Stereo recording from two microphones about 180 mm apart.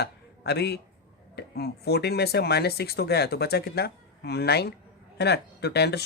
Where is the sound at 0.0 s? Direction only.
65° left (ahead or behind).